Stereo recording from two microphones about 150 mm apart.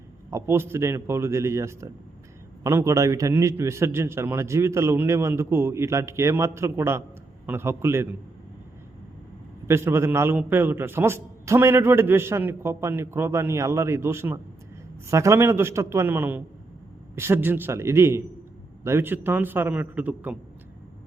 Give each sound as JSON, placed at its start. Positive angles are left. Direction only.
{"t": 0.3, "sound": "a man's voice", "side_deg": -15}
{"t": 9.6, "sound": "a man's voice", "side_deg": -15}